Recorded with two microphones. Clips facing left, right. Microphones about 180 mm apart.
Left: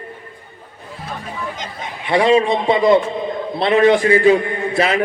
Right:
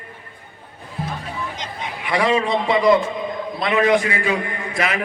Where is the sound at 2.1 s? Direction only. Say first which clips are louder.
Left 5 dB; 25° left (ahead or behind).